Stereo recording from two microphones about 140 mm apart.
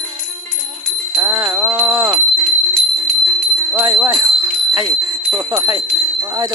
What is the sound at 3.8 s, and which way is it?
Music, 15° right (ahead or behind).